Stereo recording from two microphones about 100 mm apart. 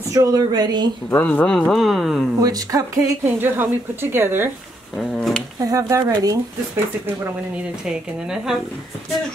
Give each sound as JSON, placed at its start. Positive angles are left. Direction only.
{"t": 0.1, "sound": "speech", "side_deg": -35}
{"t": 1.1, "sound": "speech", "side_deg": 15}
{"t": 2.4, "sound": "speech", "side_deg": -35}
{"t": 3.3, "sound": "speech", "side_deg": -20}
{"t": 4.9, "sound": "a sound", "side_deg": 10}
{"t": 5.6, "sound": "speech", "side_deg": -35}
{"t": 7.5, "sound": "speech", "side_deg": -5}